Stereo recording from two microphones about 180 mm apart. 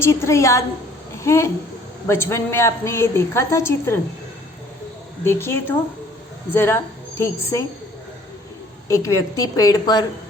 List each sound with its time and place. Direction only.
0.0 s a woman's voice: 15° left (ahead or behind)
5.2 s a woman's voice: 15° left (ahead or behind)
8.9 s a woman's voice: 15° left (ahead or behind)